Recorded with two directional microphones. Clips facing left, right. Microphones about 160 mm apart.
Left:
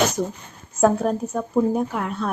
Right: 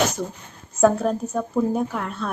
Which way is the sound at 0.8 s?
5° left (ahead or behind).